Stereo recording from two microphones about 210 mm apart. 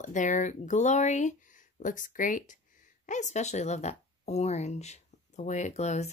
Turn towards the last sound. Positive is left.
turn(degrees=30)  # may be behind; listen again after turning